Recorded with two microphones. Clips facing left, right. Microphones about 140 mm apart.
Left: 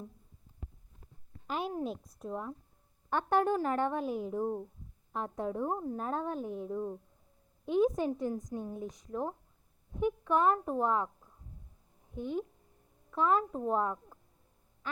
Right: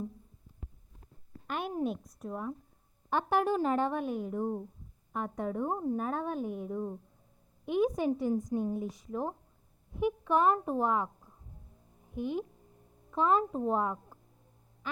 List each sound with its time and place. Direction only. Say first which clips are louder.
1.5 s a woman's voice: right 2 dB; centre (ahead or behind); by 3.9 s 15° right (ahead or behind)
3.9 s a woman's voice: even; 5° left (ahead or behind)
5.8 s a woman's voice: right 2 dB; 10° right (ahead or behind)
12.2 s a woman's voice: right 1 dB; 10° right (ahead or behind)